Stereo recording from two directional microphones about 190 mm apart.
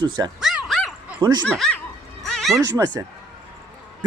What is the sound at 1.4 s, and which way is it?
Speech, 5° left (ahead or behind).